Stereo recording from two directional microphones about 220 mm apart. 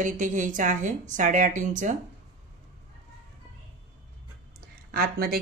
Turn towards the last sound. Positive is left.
turn(degrees=-45)  # may be behind; listen again after turning